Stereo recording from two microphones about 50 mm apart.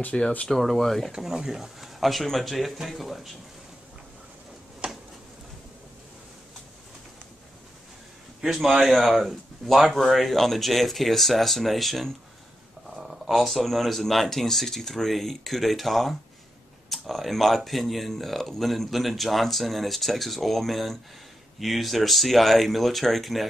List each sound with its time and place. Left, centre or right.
0.1 s speech: centre
0.5 s speech: centre
1.1 s speech: centre
4.8 s a sound: centre
8.4 s a man's voice: centre